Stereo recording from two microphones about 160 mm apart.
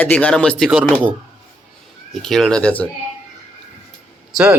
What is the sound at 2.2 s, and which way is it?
Speech, 5° left (ahead or behind).